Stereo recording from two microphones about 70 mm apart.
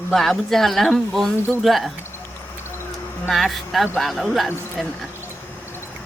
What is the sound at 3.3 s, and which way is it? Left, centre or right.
Speech, centre.